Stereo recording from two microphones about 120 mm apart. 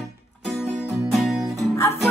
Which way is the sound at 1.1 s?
Centre (ahead or behind).